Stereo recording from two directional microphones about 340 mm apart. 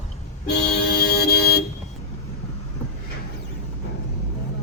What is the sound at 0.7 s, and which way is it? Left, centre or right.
Vehicle, left.